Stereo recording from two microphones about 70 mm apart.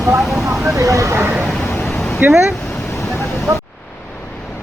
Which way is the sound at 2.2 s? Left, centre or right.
Right.